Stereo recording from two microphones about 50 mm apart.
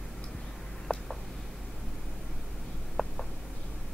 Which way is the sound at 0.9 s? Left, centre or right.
Left.